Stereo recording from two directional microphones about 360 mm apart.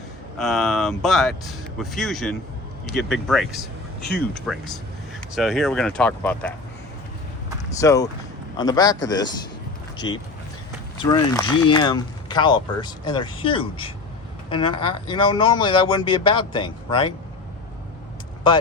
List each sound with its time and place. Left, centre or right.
0.3 s speech: centre
7.8 s speech: centre
10.0 s speech: left
10.9 s speech: centre